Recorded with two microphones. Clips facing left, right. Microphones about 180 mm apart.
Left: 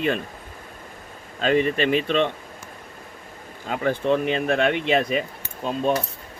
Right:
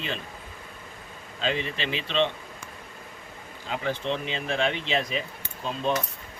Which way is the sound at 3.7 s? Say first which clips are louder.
Left 7 dB; 50° left (ahead or behind).